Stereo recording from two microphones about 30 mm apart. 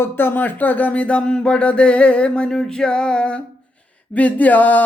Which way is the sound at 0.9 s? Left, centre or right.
Left.